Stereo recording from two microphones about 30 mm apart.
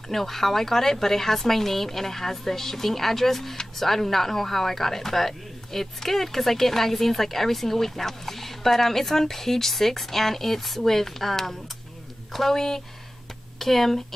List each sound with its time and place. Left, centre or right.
0.1 s speech: centre
12.5 s speech: centre